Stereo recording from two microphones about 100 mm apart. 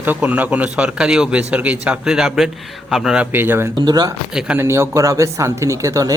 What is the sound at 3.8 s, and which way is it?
Speech, 40° right (ahead or behind).